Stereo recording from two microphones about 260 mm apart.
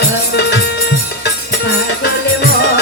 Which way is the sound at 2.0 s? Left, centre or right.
Left.